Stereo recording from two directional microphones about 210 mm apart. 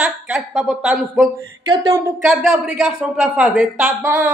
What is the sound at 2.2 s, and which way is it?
Speech, centre (ahead or behind).